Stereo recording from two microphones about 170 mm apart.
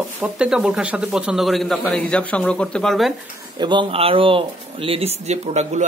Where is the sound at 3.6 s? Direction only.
30° right (ahead or behind).